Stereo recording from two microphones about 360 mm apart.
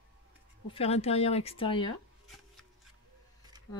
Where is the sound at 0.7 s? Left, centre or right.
Centre.